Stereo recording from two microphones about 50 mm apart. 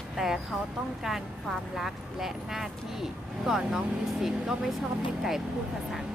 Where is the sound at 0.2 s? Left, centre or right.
Centre.